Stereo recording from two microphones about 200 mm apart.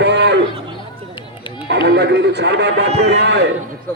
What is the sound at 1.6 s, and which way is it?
A man's voice, 60° right (ahead or behind).